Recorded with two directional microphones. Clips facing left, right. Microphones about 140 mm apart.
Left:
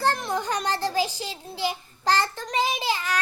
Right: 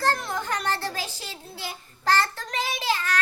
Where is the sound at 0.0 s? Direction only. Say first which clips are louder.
Left 1 dB; 15° left (ahead or behind).